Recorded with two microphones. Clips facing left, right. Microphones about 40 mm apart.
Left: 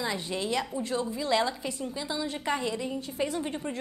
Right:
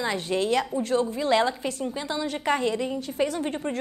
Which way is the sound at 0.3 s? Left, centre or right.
Right.